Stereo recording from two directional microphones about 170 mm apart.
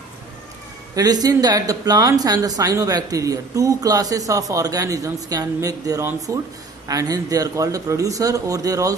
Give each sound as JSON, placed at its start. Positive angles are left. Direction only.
{"t": 0.9, "sound": "speech", "side_deg": -20}